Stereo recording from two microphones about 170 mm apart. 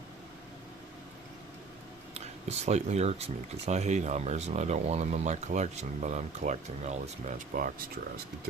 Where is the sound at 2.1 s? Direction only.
40° right (ahead or behind).